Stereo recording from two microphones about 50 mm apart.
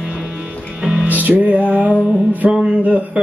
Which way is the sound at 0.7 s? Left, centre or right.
Centre.